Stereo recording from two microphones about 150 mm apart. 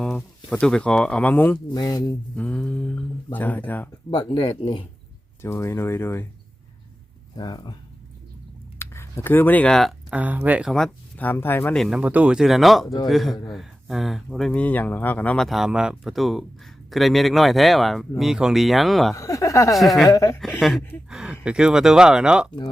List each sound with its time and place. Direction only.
0.2 s speech: 5° left (ahead or behind)
1.7 s speech: 25° left (ahead or behind)
2.3 s mantra: 10° left (ahead or behind)
3.3 s speech: 10° left (ahead or behind)
4.1 s speech: 30° left (ahead or behind)
5.4 s speech: 15° left (ahead or behind)
7.3 s speech: 30° left (ahead or behind)
8.8 s speech: 15° left (ahead or behind)
10.1 s speech: 10° right (ahead or behind); by 11.8 s 15° left (ahead or behind)
11.8 s speech: 5° right (ahead or behind)
19.1 s speech: 20° left (ahead or behind)
19.7 s speech: centre (ahead or behind)
20.1 s speech: 20° left (ahead or behind)
20.4 s speech: centre (ahead or behind)